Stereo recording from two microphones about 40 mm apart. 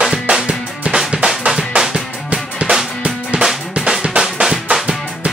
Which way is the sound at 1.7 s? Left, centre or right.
Right.